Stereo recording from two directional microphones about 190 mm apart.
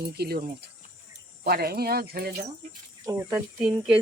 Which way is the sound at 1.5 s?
55° right (ahead or behind).